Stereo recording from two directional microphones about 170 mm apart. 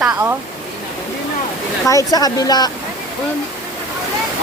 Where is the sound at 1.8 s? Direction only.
20° left (ahead or behind).